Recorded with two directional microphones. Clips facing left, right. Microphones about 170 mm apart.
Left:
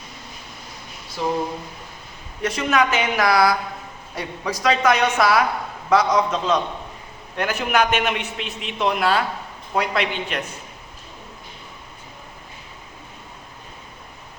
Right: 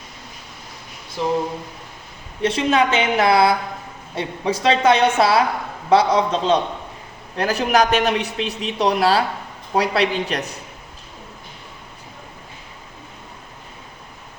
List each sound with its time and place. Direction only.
2.4 s a woman's voice: 30° right (ahead or behind)